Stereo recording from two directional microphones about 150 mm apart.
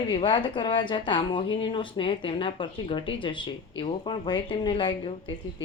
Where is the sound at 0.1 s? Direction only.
35° left (ahead or behind).